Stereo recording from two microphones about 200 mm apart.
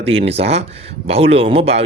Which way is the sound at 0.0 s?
30° right (ahead or behind).